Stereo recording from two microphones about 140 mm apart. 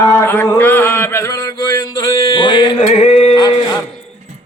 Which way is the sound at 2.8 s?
50° left (ahead or behind).